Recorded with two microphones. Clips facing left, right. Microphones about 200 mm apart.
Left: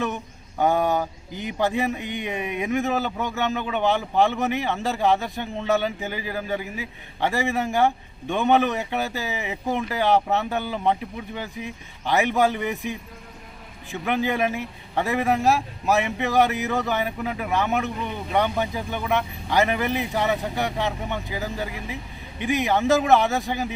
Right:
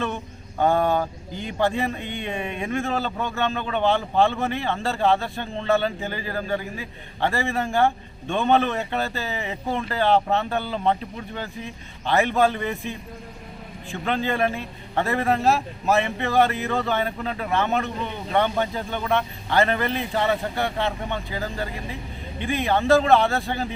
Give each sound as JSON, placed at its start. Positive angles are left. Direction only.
{"t": 0.6, "sound": "a man's voice", "side_deg": 10}